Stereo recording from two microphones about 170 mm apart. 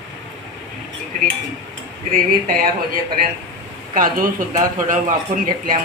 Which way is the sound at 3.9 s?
55° right (ahead or behind).